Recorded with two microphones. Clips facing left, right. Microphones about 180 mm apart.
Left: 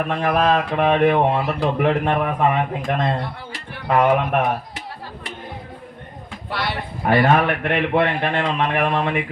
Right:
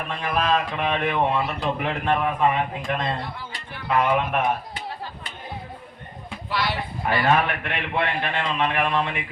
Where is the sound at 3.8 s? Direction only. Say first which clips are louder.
Left 5 dB; 60° left (ahead or behind).